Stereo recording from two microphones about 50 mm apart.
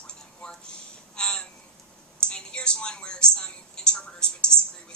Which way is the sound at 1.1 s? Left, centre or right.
Centre.